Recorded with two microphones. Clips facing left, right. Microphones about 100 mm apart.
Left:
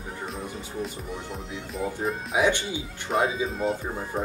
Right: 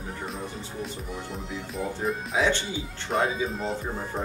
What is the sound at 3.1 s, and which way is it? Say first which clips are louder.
Music: left 1 dB; 5° left (ahead or behind).